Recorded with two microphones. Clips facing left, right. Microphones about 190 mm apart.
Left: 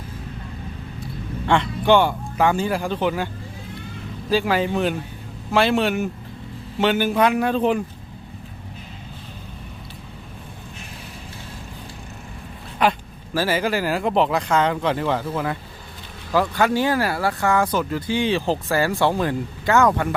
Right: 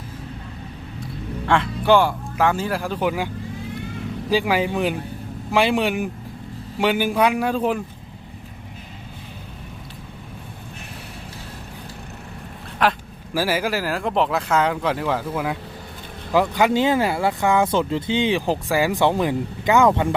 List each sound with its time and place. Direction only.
1.5 s speech: centre (ahead or behind)
4.3 s speech: 10° right (ahead or behind)
12.8 s a man's voice: centre (ahead or behind)
16.3 s speech: 15° right (ahead or behind)